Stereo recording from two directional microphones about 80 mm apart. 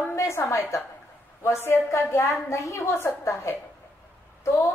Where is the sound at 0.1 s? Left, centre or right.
Left.